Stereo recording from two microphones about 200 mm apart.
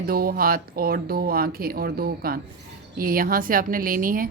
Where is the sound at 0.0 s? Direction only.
50° right (ahead or behind).